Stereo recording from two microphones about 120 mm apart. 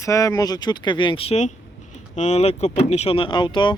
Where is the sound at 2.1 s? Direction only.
70° left (ahead or behind); by 3.7 s 40° left (ahead or behind).